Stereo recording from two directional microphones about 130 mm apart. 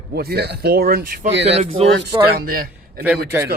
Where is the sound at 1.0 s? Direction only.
90° right.